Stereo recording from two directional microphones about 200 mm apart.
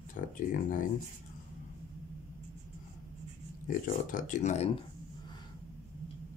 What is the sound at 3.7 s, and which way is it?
Speech, 40° left (ahead or behind).